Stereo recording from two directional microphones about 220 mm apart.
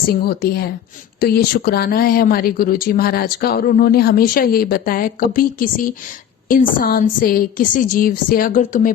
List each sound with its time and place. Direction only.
0.1 s a woman's voice: 45° left (ahead or behind)